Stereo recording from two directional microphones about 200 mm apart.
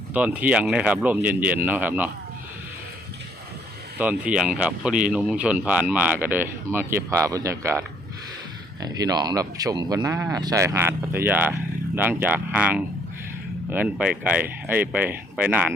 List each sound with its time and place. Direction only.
0.1 s speech: 5° right (ahead or behind)
3.9 s speech: 5° right (ahead or behind)